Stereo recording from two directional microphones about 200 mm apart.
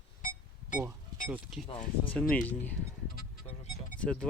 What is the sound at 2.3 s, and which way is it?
Speech, 5° left (ahead or behind).